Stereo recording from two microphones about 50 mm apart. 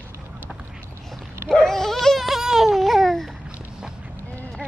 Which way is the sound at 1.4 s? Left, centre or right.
Centre.